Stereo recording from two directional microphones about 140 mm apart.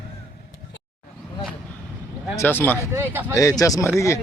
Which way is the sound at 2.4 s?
15° left (ahead or behind).